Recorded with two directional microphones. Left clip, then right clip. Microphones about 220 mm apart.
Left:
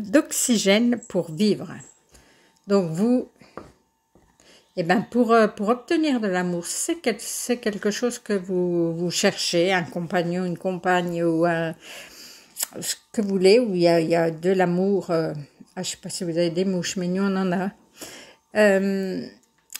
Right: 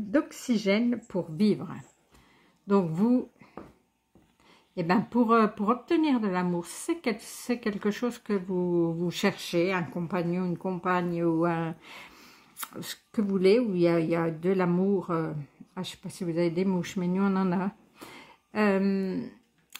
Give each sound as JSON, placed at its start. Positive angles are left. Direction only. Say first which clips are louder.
{"t": 0.1, "sound": "speech", "louder": "left 7 dB", "side_deg": 20}
{"t": 1.4, "sound": "speech", "louder": "left 5 dB", "side_deg": 5}
{"t": 4.7, "sound": "a woman's voice", "louder": "left 5 dB", "side_deg": 0}